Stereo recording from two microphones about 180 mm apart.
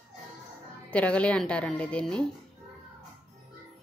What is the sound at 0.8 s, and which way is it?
A woman's voice, 5° left (ahead or behind).